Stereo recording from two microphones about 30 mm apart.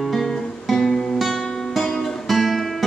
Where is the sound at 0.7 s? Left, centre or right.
Centre.